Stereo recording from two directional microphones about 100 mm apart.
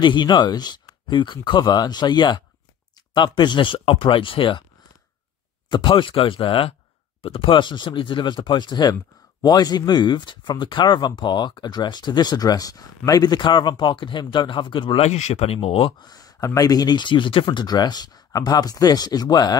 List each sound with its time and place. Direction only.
0.0 s speech: 50° left (ahead or behind)
5.7 s speech: 55° left (ahead or behind)
7.2 s speech: 75° left (ahead or behind)
16.0 s speech: 40° left (ahead or behind)